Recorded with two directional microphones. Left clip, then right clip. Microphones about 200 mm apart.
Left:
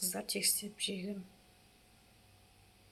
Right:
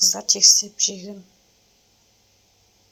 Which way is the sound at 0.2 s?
15° right (ahead or behind).